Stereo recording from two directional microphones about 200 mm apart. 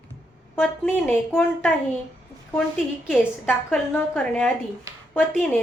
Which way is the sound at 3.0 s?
10° left (ahead or behind).